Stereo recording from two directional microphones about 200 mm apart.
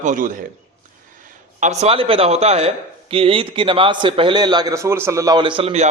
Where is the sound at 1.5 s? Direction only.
35° right (ahead or behind).